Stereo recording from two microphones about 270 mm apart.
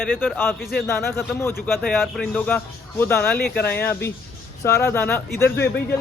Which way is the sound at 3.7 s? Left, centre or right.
Centre.